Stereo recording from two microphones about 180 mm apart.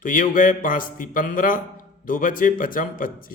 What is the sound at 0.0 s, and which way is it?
A man's voice, 50° left (ahead or behind).